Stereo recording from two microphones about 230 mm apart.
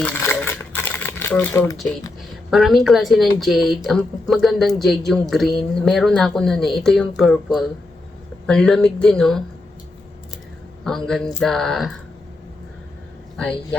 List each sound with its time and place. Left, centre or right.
0.0 s a sound: centre
2.5 s speech: centre
10.8 s speech: centre
13.3 s speech: centre